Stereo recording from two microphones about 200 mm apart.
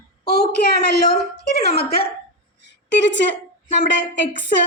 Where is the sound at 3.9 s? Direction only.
65° left (ahead or behind).